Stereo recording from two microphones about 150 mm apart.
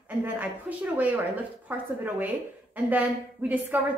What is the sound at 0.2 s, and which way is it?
A woman's voice, 10° right (ahead or behind).